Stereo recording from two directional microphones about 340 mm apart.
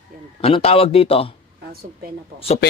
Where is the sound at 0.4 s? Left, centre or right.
Centre.